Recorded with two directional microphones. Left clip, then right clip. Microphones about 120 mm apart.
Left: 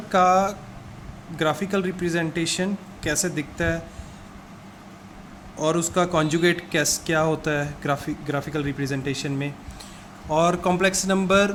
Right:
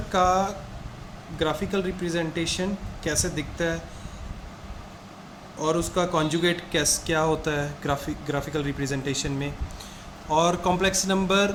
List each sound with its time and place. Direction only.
0.1 s a man's voice: 45° left (ahead or behind)
1.4 s speech: 70° left (ahead or behind); by 3.8 s 50° left (ahead or behind)
5.5 s a man's voice: 60° left (ahead or behind); by 11.5 s 45° left (ahead or behind)